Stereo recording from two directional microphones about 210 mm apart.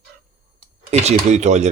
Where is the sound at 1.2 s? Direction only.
35° right (ahead or behind).